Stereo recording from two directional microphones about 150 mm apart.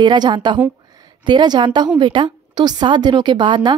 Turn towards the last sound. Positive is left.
turn(degrees=-30)  # may be behind; listen again after turning